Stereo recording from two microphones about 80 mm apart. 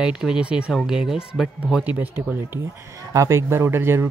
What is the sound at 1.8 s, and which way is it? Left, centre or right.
Speech, right.